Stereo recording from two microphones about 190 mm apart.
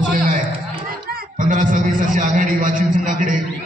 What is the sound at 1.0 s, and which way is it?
A man's voice, 50° right (ahead or behind).